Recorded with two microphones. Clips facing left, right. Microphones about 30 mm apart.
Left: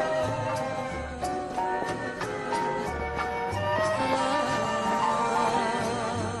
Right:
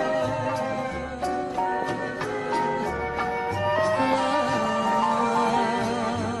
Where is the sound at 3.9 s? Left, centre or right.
Centre.